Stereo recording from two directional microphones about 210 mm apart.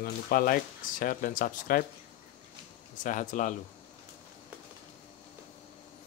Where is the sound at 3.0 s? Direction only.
40° left (ahead or behind).